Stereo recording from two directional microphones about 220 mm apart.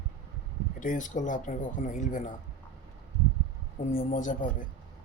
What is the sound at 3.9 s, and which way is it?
Speech, 35° left (ahead or behind).